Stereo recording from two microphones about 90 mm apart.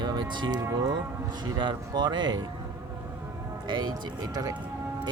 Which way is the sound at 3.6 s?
55° right (ahead or behind).